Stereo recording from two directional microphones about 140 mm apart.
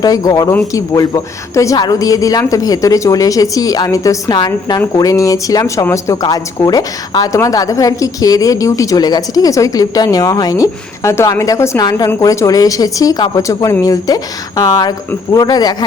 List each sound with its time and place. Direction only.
0.0 s speech: 25° left (ahead or behind)